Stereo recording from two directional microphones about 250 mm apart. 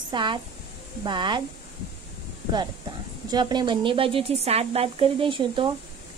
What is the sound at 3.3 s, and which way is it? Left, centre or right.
A woman's voice, centre.